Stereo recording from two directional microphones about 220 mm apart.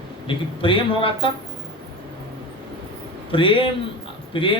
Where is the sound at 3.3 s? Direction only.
25° left (ahead or behind).